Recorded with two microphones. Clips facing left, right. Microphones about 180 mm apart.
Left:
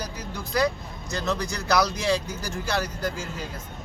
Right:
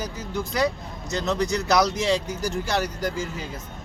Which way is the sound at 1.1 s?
20° right (ahead or behind).